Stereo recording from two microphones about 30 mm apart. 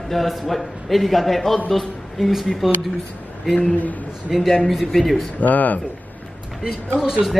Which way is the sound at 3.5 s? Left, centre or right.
Left.